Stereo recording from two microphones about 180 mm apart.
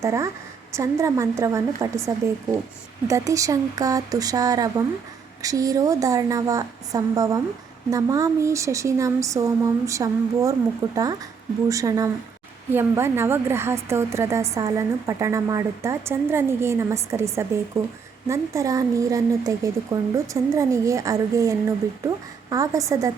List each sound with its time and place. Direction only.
0.0 s speech: 15° right (ahead or behind)
3.1 s a woman's voice: 20° right (ahead or behind)